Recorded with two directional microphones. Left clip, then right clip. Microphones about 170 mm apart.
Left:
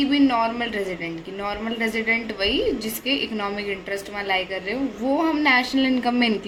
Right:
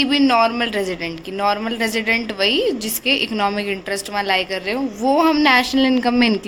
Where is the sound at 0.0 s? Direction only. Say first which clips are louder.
Right 5 dB; 55° right (ahead or behind).